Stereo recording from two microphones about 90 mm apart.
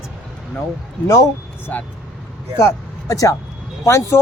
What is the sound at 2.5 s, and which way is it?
Speech, 35° left (ahead or behind).